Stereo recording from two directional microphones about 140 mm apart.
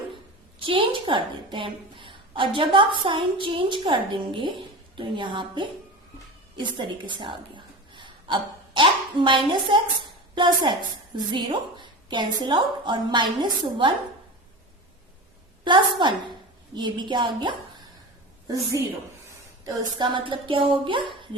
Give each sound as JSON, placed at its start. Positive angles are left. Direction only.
{"t": 0.6, "sound": "a woman's voice", "side_deg": -35}
{"t": 15.6, "sound": "a woman's voice", "side_deg": -35}
{"t": 19.6, "sound": "a woman's voice", "side_deg": -35}